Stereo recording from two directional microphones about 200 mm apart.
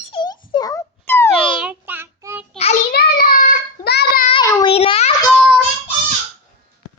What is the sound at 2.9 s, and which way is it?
Child singing, 50° left (ahead or behind).